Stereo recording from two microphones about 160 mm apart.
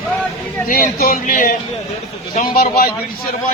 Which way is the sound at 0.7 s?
65° left (ahead or behind).